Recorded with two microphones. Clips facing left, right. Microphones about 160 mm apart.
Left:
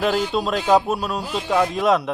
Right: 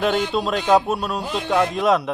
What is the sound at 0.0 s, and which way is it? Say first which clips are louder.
Speech: even; centre (ahead or behind).